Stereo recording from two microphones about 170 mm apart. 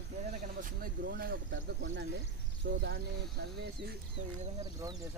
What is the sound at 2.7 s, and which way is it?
Speech, 90° right.